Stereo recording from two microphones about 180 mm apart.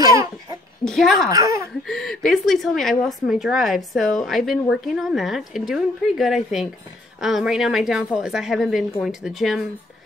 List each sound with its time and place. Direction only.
0.0 s babbling: 15° right (ahead or behind)
0.8 s a woman's voice: centre (ahead or behind)
1.3 s speech: 15° right (ahead or behind)
1.9 s a woman's voice: centre (ahead or behind)